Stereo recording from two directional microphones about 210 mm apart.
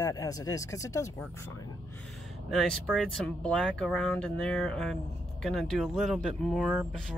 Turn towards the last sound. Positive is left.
turn(degrees=0)  # may be behind; listen again after turning